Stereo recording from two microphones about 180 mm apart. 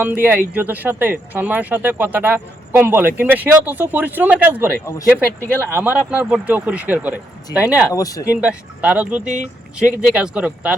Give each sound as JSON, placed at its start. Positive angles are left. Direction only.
{"t": 0.0, "sound": "speech", "side_deg": -10}
{"t": 7.9, "sound": "speech", "side_deg": 20}
{"t": 8.3, "sound": "speech", "side_deg": -5}